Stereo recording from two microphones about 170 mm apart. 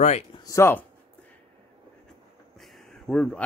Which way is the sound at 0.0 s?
40° left (ahead or behind).